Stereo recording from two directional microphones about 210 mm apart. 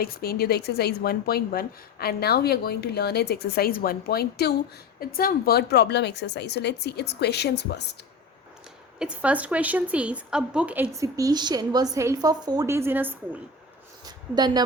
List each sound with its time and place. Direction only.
0.0 s a woman's voice: 45° left (ahead or behind)
9.0 s a woman's voice: 5° right (ahead or behind)
14.0 s a sound: 20° right (ahead or behind)